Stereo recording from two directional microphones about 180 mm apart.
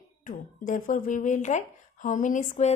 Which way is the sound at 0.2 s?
45° left (ahead or behind).